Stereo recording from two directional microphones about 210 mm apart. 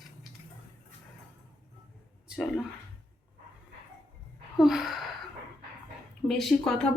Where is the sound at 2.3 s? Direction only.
Centre (ahead or behind).